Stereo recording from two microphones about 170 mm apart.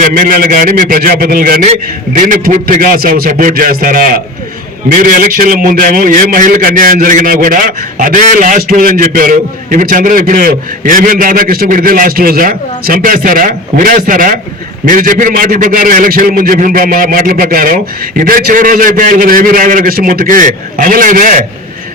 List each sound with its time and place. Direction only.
0.0 s a man's voice: 55° right (ahead or behind)